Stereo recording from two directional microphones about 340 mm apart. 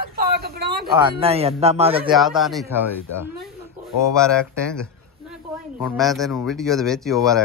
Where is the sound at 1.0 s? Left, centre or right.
Centre.